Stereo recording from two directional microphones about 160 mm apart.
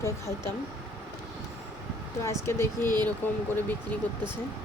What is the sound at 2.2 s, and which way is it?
A woman's voice, 15° left (ahead or behind).